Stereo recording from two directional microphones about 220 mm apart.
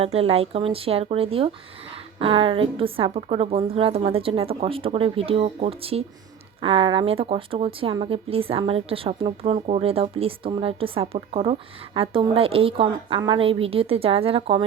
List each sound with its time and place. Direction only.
0.0 s speech: 25° right (ahead or behind)